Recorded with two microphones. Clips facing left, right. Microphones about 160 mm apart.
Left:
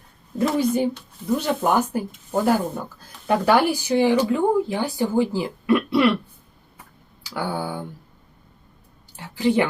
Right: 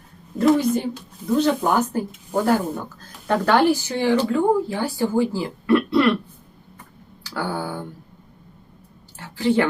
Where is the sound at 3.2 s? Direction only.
10° left (ahead or behind).